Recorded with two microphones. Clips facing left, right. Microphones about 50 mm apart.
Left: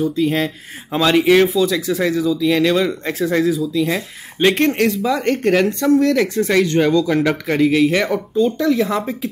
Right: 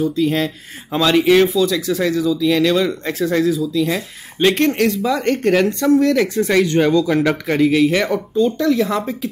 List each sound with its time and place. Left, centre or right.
0.0 s speech: centre